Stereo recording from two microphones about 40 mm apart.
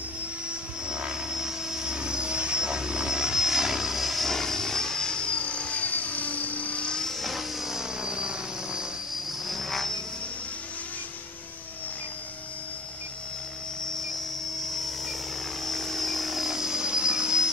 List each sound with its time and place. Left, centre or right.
0.8 s vehicle: right; by 4.3 s centre
4.3 s helicopter: centre; by 6.9 s left
6.9 s vehicle: centre
7.2 s vehicle: centre
7.6 s helicopter: centre
9.5 s helicopter: centre
15.6 s helicopter: centre